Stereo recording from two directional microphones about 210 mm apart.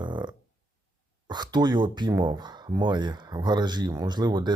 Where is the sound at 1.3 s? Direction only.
20° right (ahead or behind).